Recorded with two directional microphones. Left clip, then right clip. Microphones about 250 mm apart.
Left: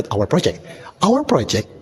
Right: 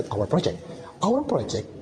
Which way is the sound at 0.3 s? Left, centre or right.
Left.